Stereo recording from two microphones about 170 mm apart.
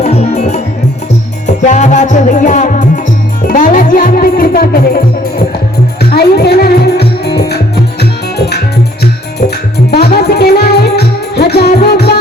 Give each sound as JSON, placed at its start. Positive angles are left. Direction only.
{"t": 0.0, "sound": "music", "side_deg": 40}
{"t": 9.9, "sound": "music", "side_deg": 70}